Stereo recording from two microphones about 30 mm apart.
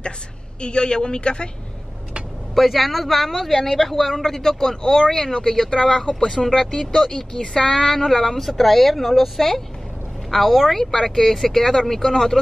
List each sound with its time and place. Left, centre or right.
0.6 s a woman's voice: left
2.5 s speech: centre
4.1 s speech: centre
10.3 s speech: centre